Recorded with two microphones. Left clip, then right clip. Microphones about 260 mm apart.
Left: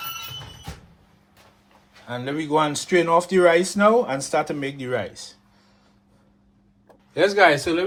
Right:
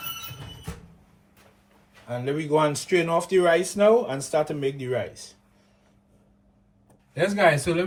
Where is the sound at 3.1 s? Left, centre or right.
Left.